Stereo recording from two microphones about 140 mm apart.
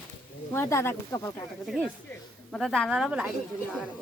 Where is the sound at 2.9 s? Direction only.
5° right (ahead or behind).